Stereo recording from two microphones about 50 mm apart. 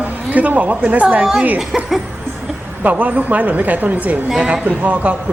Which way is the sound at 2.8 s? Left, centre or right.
Right.